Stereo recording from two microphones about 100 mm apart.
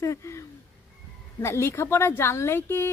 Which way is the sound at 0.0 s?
30° left (ahead or behind).